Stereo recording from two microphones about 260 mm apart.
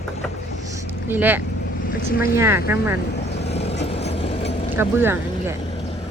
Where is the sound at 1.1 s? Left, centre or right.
Centre.